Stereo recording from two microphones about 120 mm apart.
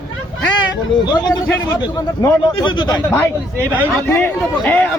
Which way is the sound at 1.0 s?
35° left (ahead or behind).